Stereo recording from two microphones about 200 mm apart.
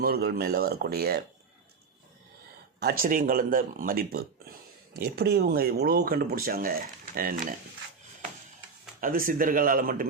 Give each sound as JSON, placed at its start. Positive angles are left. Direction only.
{"t": 0.0, "sound": "speech", "side_deg": -50}
{"t": 2.8, "sound": "speech", "side_deg": -45}
{"t": 9.0, "sound": "speech", "side_deg": -45}